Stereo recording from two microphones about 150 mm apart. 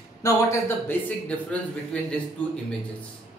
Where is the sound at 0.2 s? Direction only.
15° left (ahead or behind).